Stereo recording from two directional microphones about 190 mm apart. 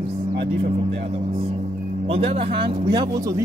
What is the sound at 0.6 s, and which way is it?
Speech, 30° right (ahead or behind).